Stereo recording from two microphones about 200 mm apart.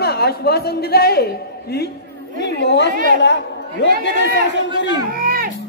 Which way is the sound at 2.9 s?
45° right (ahead or behind).